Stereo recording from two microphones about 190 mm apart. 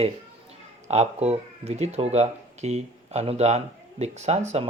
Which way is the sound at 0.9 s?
35° right (ahead or behind).